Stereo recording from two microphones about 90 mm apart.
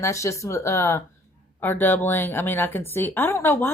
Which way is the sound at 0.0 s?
35° left (ahead or behind).